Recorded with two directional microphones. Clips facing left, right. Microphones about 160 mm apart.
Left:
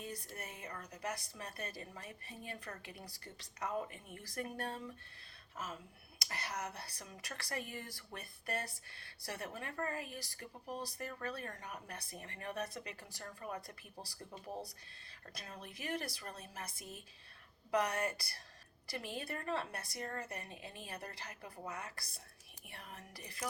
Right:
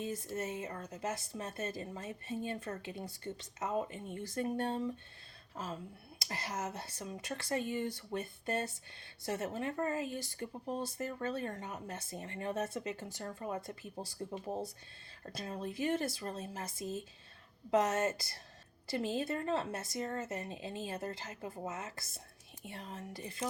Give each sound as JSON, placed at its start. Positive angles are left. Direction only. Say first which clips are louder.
{"t": 0.0, "sound": "speech", "louder": "right 9 dB", "side_deg": -25}